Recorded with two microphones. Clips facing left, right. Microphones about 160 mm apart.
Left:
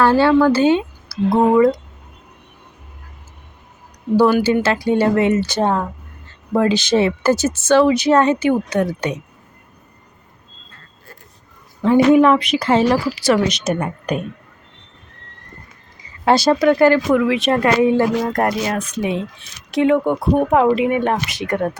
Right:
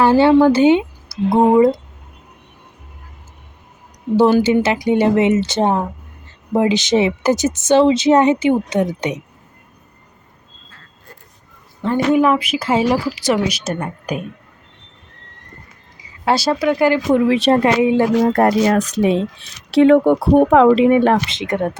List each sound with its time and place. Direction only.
0.0 s speech: 20° right (ahead or behind)
4.2 s a woman's voice: 25° right (ahead or behind)
12.1 s speech: 5° right (ahead or behind)
16.2 s speech: 5° right (ahead or behind)
17.1 s a woman's voice: 30° right (ahead or behind)
17.7 s speech: 15° right (ahead or behind)
18.3 s a woman's voice: 30° right (ahead or behind)